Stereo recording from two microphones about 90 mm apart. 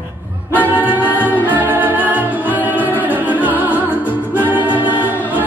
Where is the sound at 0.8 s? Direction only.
20° right (ahead or behind).